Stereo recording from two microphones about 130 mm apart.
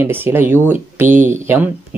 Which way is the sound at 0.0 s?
15° right (ahead or behind).